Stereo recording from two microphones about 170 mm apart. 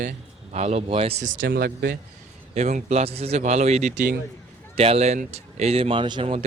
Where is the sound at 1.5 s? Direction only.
70° right (ahead or behind).